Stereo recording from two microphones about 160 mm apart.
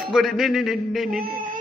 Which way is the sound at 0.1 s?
Centre (ahead or behind).